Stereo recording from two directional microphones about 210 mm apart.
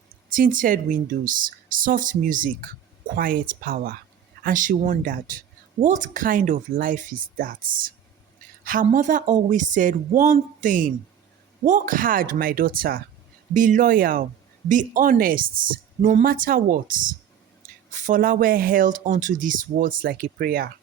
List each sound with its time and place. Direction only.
0.3 s speech: 40° right (ahead or behind)